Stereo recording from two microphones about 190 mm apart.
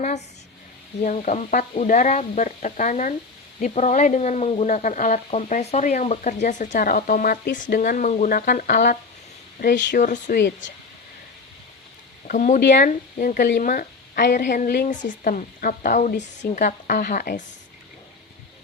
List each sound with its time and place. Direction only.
1.0 s speech: 40° left (ahead or behind); by 9.9 s 60° left (ahead or behind)
9.9 s a woman's voice: 45° left (ahead or behind)
10.3 s speech: 60° left (ahead or behind)
12.3 s a woman's voice: 45° left (ahead or behind)